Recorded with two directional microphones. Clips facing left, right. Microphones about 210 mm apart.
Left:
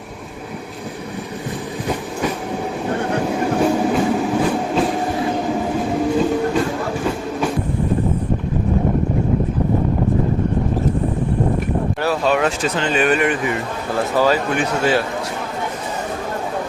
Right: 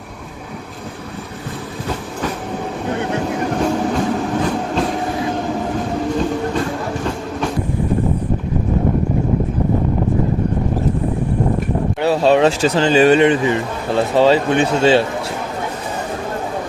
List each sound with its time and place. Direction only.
3.6 s train: 5° left (ahead or behind)
12.0 s speech: 30° right (ahead or behind)